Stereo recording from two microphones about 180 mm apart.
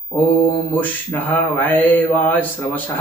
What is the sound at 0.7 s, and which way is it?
Mantra, 10° left (ahead or behind).